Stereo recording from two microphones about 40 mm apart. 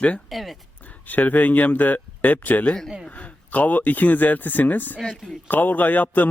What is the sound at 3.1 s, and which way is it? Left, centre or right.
Speech, left.